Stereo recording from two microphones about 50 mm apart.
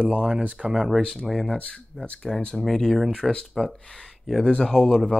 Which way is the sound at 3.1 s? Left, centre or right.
Centre.